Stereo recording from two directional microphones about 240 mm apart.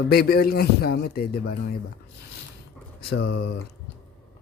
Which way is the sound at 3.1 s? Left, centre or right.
Left.